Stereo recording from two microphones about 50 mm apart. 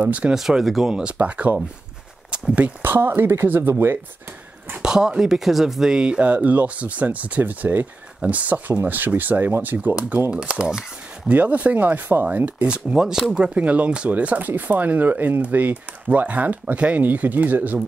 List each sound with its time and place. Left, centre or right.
0.0 s speech: right
0.3 s speech: centre
1.1 s speech: right
2.8 s speech: right
4.8 s speech: centre
6.2 s speech: right
10.3 s speech: centre
11.2 s speech: right
12.3 s speech: right
12.6 s speech: right